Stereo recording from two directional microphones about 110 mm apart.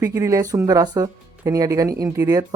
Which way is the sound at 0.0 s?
30° right (ahead or behind).